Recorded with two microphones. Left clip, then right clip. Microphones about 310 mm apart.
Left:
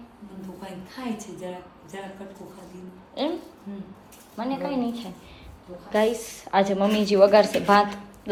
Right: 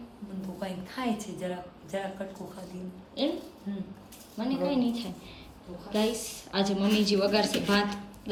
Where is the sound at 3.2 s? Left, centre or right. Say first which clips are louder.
Left 2 dB; centre.